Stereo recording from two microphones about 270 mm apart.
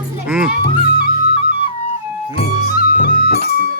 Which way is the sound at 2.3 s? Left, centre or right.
Left.